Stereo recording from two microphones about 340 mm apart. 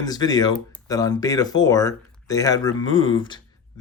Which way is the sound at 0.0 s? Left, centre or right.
Centre.